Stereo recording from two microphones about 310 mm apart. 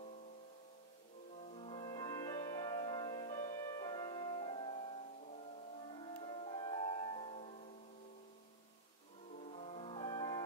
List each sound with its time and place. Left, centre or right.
1.5 s music: centre
5.9 s music: centre
9.5 s music: centre